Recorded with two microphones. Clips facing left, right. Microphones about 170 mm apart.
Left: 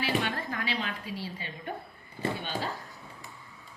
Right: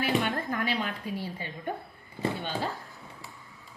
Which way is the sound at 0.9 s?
50° right (ahead or behind).